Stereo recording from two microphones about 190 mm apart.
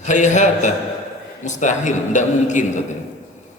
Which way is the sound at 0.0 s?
40° left (ahead or behind).